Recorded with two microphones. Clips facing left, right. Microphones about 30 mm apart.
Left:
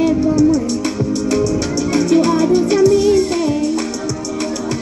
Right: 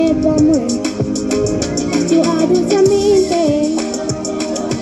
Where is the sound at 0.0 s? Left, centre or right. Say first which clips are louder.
Right 1 dB; right.